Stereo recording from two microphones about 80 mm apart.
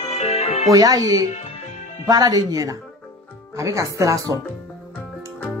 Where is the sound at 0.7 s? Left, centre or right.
Right.